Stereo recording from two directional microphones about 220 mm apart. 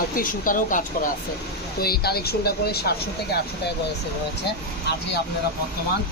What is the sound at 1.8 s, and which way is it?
Speech, 45° left (ahead or behind).